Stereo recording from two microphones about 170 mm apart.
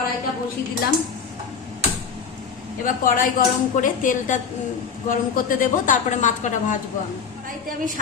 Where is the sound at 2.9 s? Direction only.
55° left (ahead or behind).